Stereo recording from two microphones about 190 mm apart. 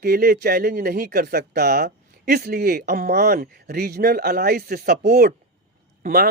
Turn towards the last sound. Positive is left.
turn(degrees=-50)  # may be behind; listen again after turning